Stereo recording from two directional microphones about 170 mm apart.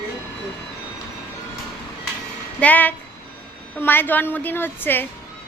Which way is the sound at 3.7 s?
10° left (ahead or behind).